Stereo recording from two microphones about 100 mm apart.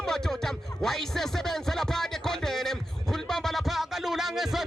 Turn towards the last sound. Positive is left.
turn(degrees=0)  # may be behind; listen again after turning